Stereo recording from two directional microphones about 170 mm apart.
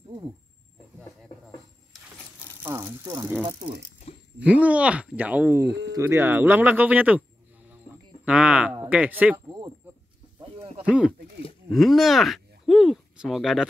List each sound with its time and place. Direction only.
2.6 s speech: 15° right (ahead or behind)
3.4 s speech: 30° right (ahead or behind)
4.1 s a sound: 35° left (ahead or behind)
4.4 s speech: 10° right (ahead or behind)
5.7 s speech: 90° right
5.9 s speech: 15° right (ahead or behind)
8.3 s a sound: 10° right (ahead or behind)
8.8 s speech: 10° right (ahead or behind)
10.8 s speech: 5° right (ahead or behind)
11.7 s a sound: centre (ahead or behind)